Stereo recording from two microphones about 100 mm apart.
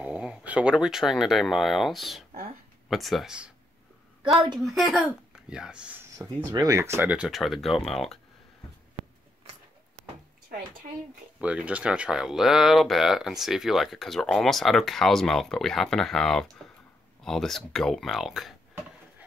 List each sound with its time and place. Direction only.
0.0 s speech: 10° right (ahead or behind)
4.6 s speech: centre (ahead or behind)
6.2 s speech: 35° right (ahead or behind)
6.8 s speech: 25° right (ahead or behind)
7.1 s speech: 5° right (ahead or behind)
11.4 s speech: 15° right (ahead or behind)